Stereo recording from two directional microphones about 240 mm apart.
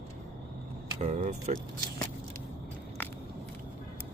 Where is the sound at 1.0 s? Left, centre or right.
Right.